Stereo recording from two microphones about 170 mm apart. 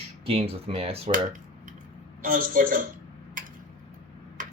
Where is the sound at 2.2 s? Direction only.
55° right (ahead or behind).